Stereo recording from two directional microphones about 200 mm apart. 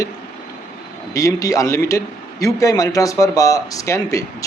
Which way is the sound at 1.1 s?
15° left (ahead or behind).